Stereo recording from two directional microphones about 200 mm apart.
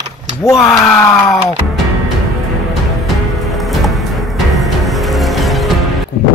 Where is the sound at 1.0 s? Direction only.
10° left (ahead or behind).